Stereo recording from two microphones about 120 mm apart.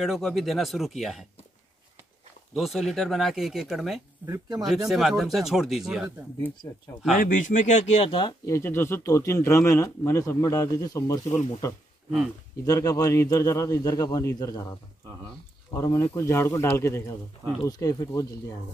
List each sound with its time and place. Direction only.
0.0 s speech: centre (ahead or behind)
2.5 s speech: centre (ahead or behind)
4.3 s speech: 30° right (ahead or behind)
4.6 s speech: centre (ahead or behind)
7.3 s speech: 90° left; by 8.1 s 70° left (ahead or behind)
8.1 s speech: 40° left (ahead or behind)
8.5 s speech: 20° left (ahead or behind)
12.6 s speech: 30° left (ahead or behind)